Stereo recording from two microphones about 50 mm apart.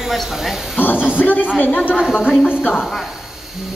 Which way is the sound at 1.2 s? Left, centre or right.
Left.